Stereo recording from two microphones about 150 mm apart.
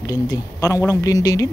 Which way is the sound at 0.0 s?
25° left (ahead or behind).